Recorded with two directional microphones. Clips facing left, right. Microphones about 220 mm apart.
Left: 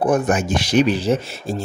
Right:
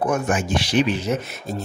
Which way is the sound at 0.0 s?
35° left (ahead or behind).